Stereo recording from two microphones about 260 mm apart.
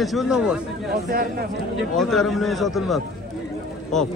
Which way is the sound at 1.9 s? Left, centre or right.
Centre.